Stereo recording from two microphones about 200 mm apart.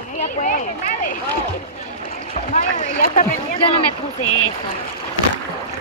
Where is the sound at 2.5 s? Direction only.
40° left (ahead or behind).